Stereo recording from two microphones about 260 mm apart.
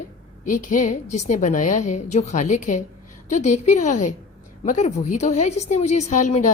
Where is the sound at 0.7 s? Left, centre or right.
Left.